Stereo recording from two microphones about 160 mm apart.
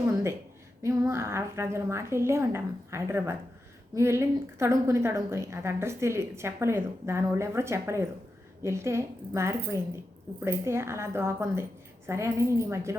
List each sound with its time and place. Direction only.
0.8 s a woman's voice: 20° right (ahead or behind)